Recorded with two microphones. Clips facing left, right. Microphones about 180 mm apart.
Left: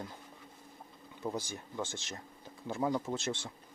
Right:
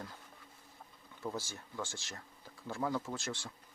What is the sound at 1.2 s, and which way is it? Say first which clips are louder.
Speech: left 3 dB; 15° left (ahead or behind).